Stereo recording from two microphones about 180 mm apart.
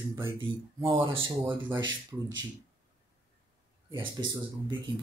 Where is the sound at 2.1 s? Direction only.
10° right (ahead or behind).